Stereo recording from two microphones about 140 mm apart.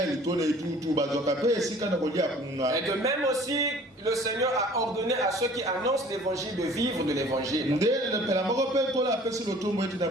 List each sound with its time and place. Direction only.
0.3 s a man's voice: 25° right (ahead or behind)
6.7 s a man's voice: 25° right (ahead or behind)